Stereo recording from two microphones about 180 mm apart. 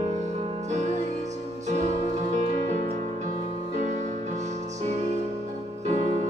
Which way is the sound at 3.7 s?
40° right (ahead or behind).